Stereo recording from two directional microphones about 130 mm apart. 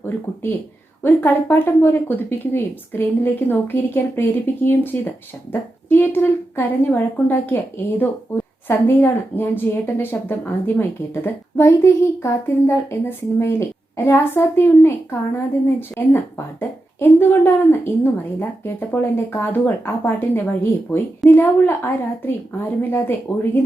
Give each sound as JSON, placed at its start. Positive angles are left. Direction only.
{"t": 1.0, "sound": "speech", "side_deg": 15}